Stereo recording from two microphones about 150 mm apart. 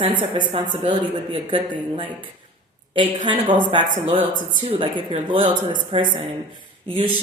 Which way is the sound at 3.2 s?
35° right (ahead or behind).